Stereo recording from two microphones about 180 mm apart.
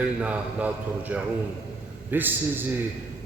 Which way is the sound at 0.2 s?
10° right (ahead or behind).